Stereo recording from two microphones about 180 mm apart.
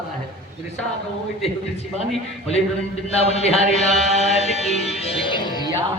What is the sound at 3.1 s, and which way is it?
Music, 35° left (ahead or behind).